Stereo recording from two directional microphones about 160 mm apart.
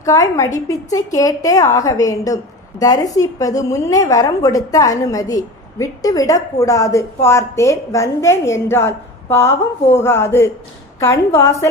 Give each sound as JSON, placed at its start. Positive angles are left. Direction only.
{"t": 0.0, "sound": "a woman's voice", "side_deg": 20}